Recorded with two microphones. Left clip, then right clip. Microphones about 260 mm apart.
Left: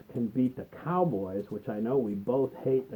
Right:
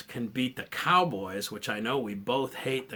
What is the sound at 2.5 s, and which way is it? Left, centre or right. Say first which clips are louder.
Speech: left 3 dB; centre.